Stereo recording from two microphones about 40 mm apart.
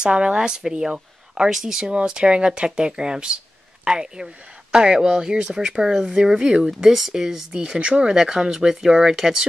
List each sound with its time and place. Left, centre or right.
0.0 s speech: right
1.9 s speech: right